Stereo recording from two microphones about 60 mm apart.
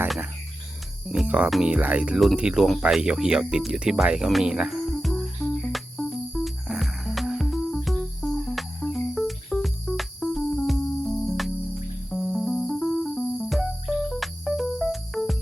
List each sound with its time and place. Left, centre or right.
1.0 s speech: centre
1.6 s speech: right
4.4 s music: centre